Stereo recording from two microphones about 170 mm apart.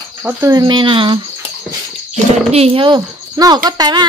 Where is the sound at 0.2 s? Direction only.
10° right (ahead or behind).